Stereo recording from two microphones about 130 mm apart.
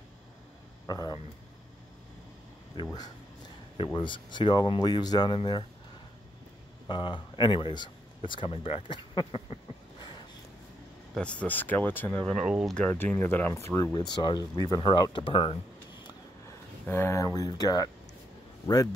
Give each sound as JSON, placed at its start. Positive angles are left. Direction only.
{"t": 0.8, "sound": "speech", "side_deg": 30}
{"t": 2.7, "sound": "speech", "side_deg": 35}
{"t": 6.9, "sound": "speech", "side_deg": 40}
{"t": 11.1, "sound": "speech", "side_deg": 10}
{"t": 12.4, "sound": "speech", "side_deg": -5}
{"t": 12.7, "sound": "speech", "side_deg": 10}
{"t": 16.8, "sound": "speech", "side_deg": 15}